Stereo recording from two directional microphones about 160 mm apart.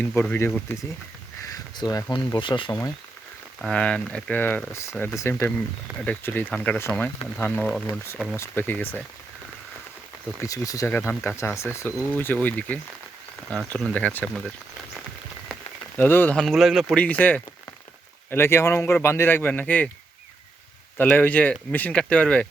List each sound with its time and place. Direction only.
0.0 s speech: 10° left (ahead or behind)
1.7 s speech: 25° left (ahead or behind)
3.6 s speech: 5° left (ahead or behind)
10.4 s speech: 20° left (ahead or behind)
16.0 s speech: 10° left (ahead or behind)
16.4 s speech: centre (ahead or behind)
21.0 s speech: 10° left (ahead or behind)